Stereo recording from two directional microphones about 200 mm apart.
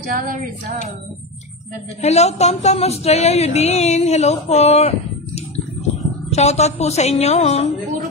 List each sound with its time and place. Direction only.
0.0 s music: 45° right (ahead or behind)
2.0 s speech: 35° left (ahead or behind)